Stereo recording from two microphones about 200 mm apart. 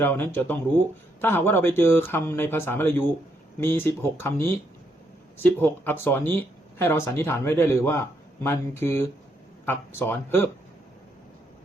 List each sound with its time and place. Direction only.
0.0 s speech: 10° left (ahead or behind)